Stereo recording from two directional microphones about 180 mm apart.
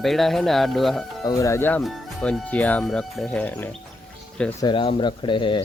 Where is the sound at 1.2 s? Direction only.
15° left (ahead or behind).